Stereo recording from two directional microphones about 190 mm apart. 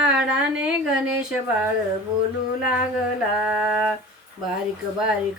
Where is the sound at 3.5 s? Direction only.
10° right (ahead or behind).